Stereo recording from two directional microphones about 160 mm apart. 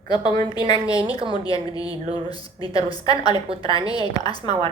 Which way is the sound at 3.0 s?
25° left (ahead or behind).